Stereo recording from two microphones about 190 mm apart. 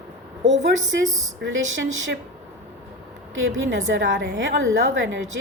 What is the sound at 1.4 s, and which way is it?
Speech, 80° right.